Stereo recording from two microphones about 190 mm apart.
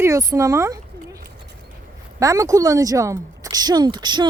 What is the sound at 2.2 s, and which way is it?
Speech, 15° right (ahead or behind).